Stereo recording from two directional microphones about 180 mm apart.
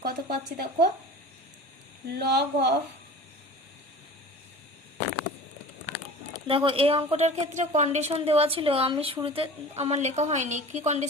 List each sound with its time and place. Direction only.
0.0 s speech: 60° right (ahead or behind)
2.0 s speech: 65° right (ahead or behind)
6.5 s a woman's voice: 30° right (ahead or behind)